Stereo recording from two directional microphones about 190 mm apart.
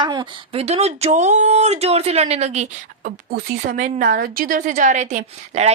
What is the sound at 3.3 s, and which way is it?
A woman's voice, 45° right (ahead or behind).